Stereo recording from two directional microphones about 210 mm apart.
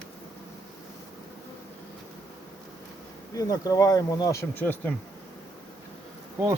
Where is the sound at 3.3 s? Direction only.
15° left (ahead or behind).